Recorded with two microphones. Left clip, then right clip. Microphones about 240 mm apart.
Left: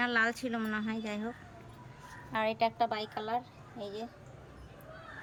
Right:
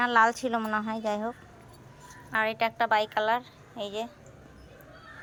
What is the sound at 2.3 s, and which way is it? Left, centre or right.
A woman's voice, centre.